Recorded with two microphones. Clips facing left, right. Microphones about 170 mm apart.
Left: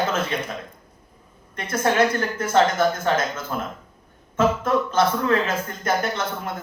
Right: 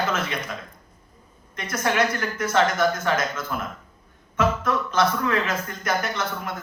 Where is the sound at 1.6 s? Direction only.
30° left (ahead or behind).